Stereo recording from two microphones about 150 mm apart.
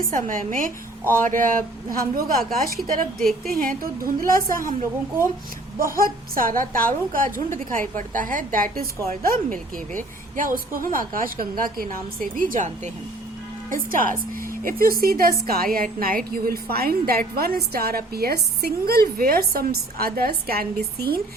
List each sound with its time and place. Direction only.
0.1 s a woman's voice: 60° right (ahead or behind)
3.2 s a woman's voice: centre (ahead or behind)
3.5 s speech: 70° right (ahead or behind)
6.0 s a woman's voice: 70° right (ahead or behind)
13.7 s a woman's voice: 65° right (ahead or behind); by 21.2 s 85° right